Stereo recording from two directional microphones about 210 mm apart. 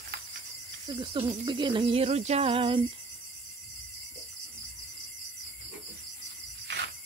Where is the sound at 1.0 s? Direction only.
20° right (ahead or behind).